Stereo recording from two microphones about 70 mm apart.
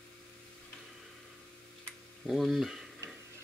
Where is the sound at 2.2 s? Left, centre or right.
Centre.